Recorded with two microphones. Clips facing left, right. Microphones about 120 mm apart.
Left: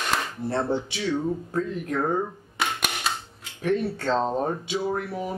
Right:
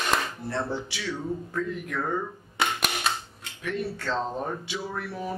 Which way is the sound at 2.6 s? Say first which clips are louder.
Right 1 dB; centre (ahead or behind).